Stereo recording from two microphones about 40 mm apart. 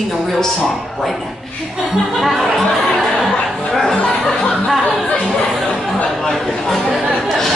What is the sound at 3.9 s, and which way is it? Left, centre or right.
Music, centre.